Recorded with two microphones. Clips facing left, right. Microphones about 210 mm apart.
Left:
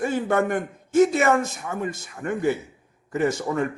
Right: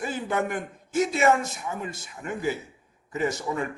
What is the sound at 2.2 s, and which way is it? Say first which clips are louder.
Speech: left 6 dB; 50° left (ahead or behind).